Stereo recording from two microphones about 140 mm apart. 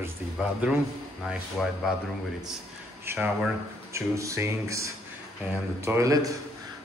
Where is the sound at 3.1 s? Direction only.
15° right (ahead or behind).